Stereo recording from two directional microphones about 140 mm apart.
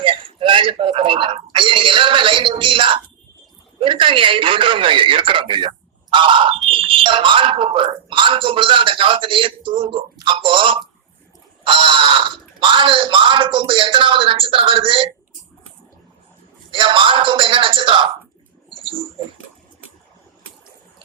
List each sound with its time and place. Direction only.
0.0 s telephone: 40° right (ahead or behind)
3.8 s a man's voice: 35° right (ahead or behind)
16.7 s speech: 40° right (ahead or behind)
18.7 s a sound: 40° right (ahead or behind)